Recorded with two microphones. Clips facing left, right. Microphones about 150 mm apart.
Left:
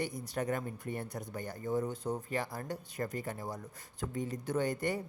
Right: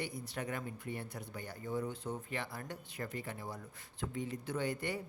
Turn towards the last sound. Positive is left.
turn(degrees=45)  # may be behind; listen again after turning